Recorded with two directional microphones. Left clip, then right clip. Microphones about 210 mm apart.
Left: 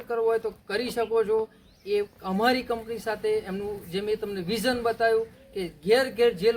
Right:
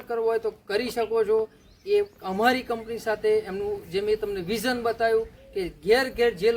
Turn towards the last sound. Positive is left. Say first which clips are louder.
# even
turn(degrees=-10)  # may be behind; listen again after turning